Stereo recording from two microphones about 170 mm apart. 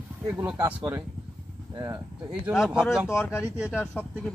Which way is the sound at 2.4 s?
5° right (ahead or behind).